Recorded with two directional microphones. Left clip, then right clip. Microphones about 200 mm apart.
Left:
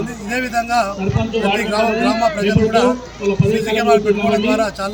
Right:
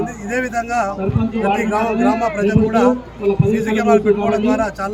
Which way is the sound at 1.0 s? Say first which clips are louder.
Left 1 dB; 45° right (ahead or behind).